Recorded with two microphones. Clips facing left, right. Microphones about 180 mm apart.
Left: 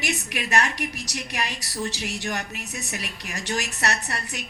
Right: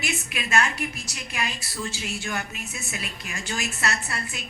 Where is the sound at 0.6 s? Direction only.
70° left (ahead or behind).